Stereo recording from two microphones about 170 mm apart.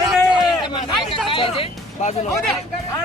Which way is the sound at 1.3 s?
30° left (ahead or behind).